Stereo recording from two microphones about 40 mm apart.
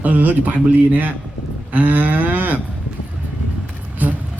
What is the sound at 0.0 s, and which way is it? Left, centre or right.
Speech, right.